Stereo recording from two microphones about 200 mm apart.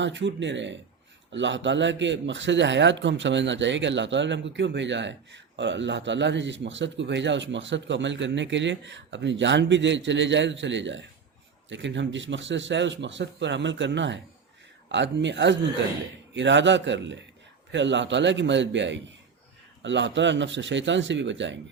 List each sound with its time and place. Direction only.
0.0 s a man's voice: 65° right (ahead or behind)